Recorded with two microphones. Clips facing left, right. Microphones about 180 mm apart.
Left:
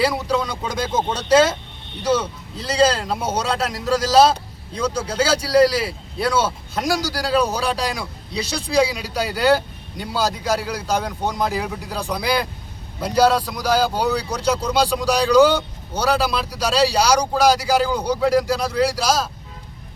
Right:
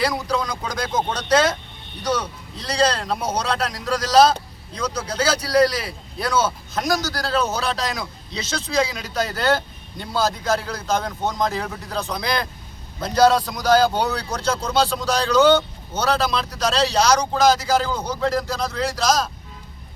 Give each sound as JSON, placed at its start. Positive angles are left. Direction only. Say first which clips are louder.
{"t": 0.0, "sound": "a man's voice", "louder": "left 2 dB", "side_deg": 5}
{"t": 0.7, "sound": "speech", "louder": "left 2 dB", "side_deg": 25}
{"t": 1.1, "sound": "a man's voice", "louder": "left 4 dB", "side_deg": 5}
{"t": 3.8, "sound": "speech", "louder": "left 4 dB", "side_deg": 25}
{"t": 5.3, "sound": "a man's voice", "louder": "left 2 dB", "side_deg": 30}
{"t": 7.1, "sound": "a man's voice", "louder": "left 3 dB", "side_deg": 10}